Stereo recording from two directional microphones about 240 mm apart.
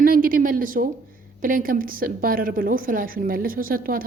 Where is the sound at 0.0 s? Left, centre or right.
Right.